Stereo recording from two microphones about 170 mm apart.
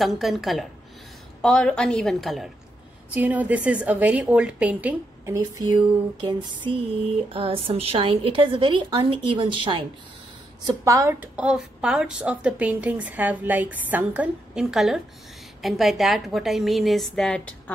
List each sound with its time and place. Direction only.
0.0 s a woman's voice: centre (ahead or behind)
5.3 s a sound: 20° right (ahead or behind)
7.3 s a woman's voice: 35° right (ahead or behind)
10.7 s a woman's voice: 20° right (ahead or behind); by 17.7 s 5° left (ahead or behind)